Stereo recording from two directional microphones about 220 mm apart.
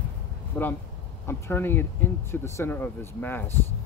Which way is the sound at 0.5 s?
10° left (ahead or behind).